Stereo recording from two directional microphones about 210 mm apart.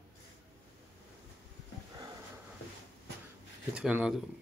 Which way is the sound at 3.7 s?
5° right (ahead or behind).